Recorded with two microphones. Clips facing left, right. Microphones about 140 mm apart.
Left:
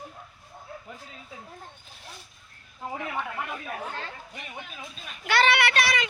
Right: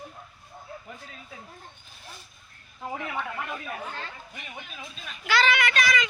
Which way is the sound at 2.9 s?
15° left (ahead or behind).